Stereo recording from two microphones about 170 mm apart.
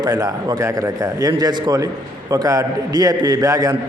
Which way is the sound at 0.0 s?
20° right (ahead or behind).